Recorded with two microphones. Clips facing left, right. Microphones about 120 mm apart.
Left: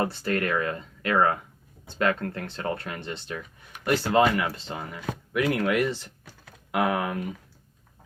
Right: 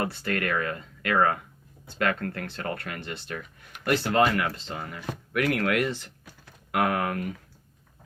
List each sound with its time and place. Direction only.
0.0 s speech: 25° left (ahead or behind)